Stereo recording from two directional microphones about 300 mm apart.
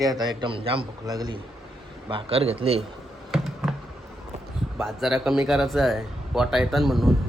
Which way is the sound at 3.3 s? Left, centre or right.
Centre.